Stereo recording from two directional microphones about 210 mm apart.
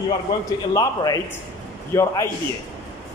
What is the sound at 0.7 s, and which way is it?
A man's voice, 20° left (ahead or behind).